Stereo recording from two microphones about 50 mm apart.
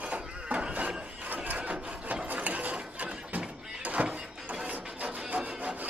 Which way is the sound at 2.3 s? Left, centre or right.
Right.